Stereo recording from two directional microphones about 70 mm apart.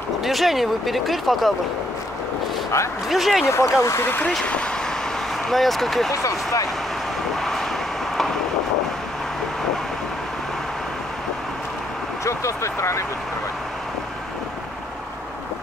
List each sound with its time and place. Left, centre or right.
0.2 s speech: centre
3.1 s speech: centre
3.4 s speech: left
5.5 s speech: centre
6.1 s speech: left
7.3 s vehicle: centre
12.3 s speech: left